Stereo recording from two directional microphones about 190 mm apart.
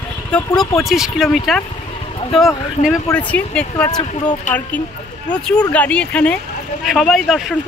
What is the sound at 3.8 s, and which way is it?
Speech, 20° left (ahead or behind).